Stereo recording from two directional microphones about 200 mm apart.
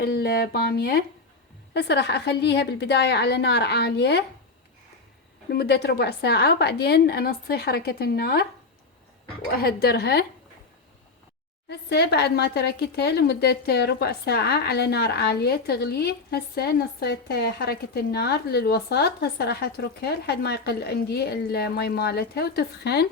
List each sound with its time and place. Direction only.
0.0 s a woman's voice: 50° left (ahead or behind)
5.5 s speech: 55° left (ahead or behind)
9.6 s speech: 50° left (ahead or behind)
11.7 s speech: 55° left (ahead or behind)